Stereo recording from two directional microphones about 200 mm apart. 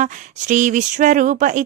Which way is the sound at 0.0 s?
40° right (ahead or behind).